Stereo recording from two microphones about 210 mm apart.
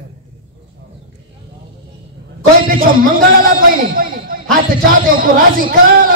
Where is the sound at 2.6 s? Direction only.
40° right (ahead or behind).